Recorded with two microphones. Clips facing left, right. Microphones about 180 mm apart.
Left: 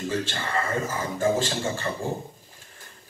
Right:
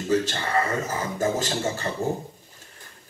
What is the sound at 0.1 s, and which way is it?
Speech, 40° right (ahead or behind).